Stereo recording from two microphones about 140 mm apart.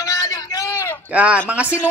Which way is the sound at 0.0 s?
25° left (ahead or behind).